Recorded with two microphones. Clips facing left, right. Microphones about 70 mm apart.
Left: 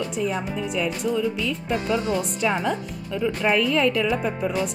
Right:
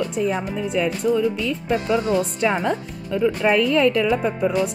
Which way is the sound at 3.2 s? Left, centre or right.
Right.